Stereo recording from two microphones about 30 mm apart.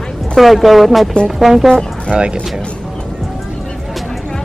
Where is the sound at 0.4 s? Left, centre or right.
Centre.